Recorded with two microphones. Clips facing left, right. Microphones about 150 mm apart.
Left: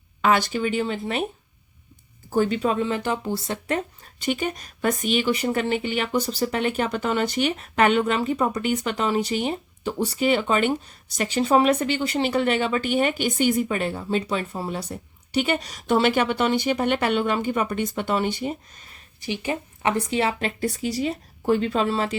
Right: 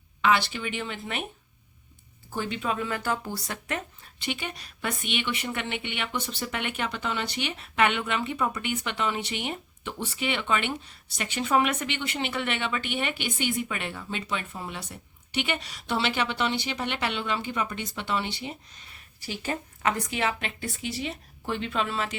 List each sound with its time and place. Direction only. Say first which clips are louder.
0.2 s speech: left 4 dB; 45° left (ahead or behind)
2.3 s speech: left 8 dB; 40° left (ahead or behind)
19.2 s speech: left 5 dB; 15° left (ahead or behind)
19.9 s speech: left 5 dB; 30° left (ahead or behind)